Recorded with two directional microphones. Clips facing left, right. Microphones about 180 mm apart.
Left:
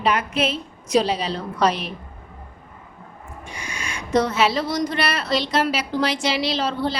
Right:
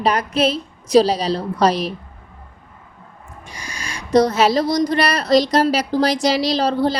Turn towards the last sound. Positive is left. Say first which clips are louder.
# right 5 dB
turn(degrees=-40)  # may be behind; listen again after turning